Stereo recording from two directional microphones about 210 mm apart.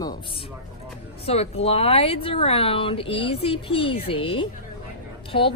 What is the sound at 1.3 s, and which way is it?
Speech, 30° left (ahead or behind).